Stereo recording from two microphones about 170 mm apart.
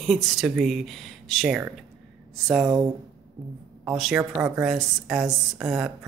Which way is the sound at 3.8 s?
Centre (ahead or behind).